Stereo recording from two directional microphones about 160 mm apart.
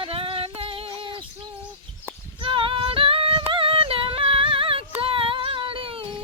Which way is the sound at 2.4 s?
30° right (ahead or behind).